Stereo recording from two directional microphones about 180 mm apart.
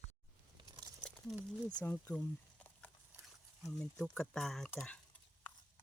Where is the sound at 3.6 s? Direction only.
Centre (ahead or behind).